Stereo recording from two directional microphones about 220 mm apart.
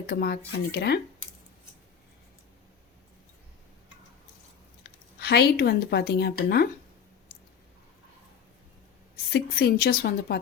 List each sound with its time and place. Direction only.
0.1 s speech: 45° left (ahead or behind)
5.2 s speech: 45° left (ahead or behind)
9.3 s speech: 45° left (ahead or behind)